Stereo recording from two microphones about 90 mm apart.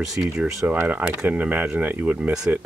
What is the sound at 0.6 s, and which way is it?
Speech, 20° right (ahead or behind).